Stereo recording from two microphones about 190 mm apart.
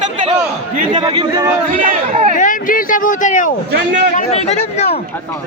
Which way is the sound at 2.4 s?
45° left (ahead or behind).